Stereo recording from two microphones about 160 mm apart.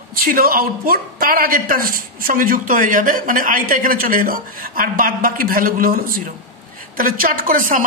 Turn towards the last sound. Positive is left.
turn(degrees=-55)  # may be behind; listen again after turning